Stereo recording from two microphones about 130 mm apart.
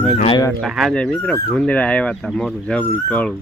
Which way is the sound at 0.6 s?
Centre (ahead or behind).